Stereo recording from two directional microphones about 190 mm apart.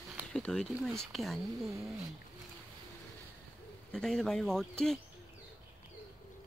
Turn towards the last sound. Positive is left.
turn(degrees=5)  # may be behind; listen again after turning